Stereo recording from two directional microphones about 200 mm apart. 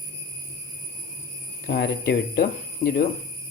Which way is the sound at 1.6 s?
60° left (ahead or behind).